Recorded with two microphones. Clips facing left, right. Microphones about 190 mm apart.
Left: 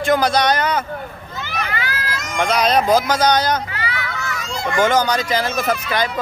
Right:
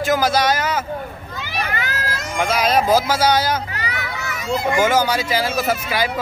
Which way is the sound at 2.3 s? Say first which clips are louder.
Left 1 dB; 5° right (ahead or behind).